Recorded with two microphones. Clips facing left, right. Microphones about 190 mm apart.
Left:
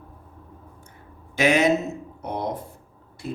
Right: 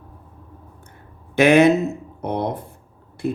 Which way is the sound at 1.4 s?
60° right (ahead or behind).